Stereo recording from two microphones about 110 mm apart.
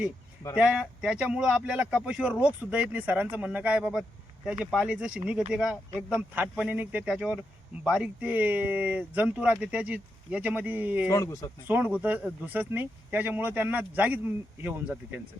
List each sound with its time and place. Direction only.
0.5 s speech: 5° right (ahead or behind)
11.1 s speech: 30° left (ahead or behind)
11.7 s speech: 15° right (ahead or behind)